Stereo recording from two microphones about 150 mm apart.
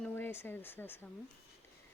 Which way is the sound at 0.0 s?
15° left (ahead or behind).